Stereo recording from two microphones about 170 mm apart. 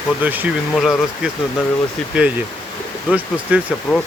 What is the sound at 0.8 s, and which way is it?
Speech, centre (ahead or behind).